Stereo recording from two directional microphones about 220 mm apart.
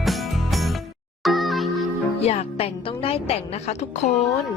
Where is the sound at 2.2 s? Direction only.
25° left (ahead or behind).